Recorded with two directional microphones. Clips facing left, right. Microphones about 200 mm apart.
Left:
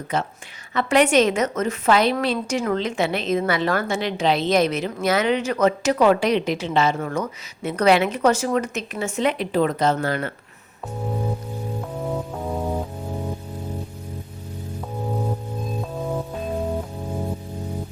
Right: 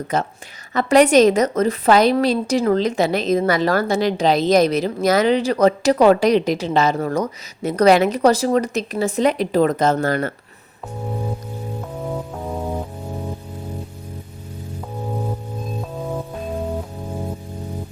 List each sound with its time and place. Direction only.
0.1 s a woman's voice: 40° right (ahead or behind)
11.8 s music: centre (ahead or behind)
15.8 s music: centre (ahead or behind)